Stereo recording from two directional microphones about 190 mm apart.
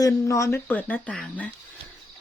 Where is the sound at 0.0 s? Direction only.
15° left (ahead or behind).